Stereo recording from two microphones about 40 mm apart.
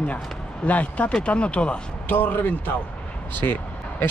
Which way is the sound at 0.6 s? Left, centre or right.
Left.